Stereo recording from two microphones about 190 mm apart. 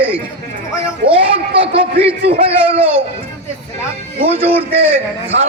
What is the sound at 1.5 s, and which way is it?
A man's voice, 30° right (ahead or behind).